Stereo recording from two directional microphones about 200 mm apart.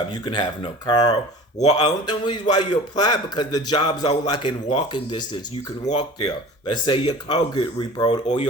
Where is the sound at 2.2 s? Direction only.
20° left (ahead or behind).